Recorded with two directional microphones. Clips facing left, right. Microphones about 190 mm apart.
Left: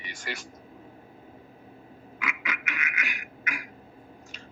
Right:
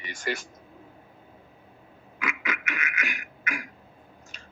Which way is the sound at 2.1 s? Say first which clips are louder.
Right 3 dB; 50° right (ahead or behind).